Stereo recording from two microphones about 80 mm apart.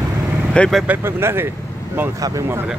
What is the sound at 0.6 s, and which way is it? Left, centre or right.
Speech, centre.